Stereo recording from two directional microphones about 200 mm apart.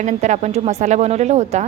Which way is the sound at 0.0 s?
35° right (ahead or behind).